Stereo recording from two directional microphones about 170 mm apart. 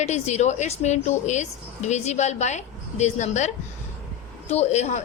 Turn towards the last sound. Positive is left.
turn(degrees=40)  # may be behind; listen again after turning